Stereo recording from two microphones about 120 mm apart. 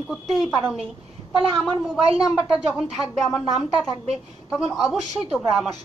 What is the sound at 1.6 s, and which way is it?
A woman's voice, centre (ahead or behind).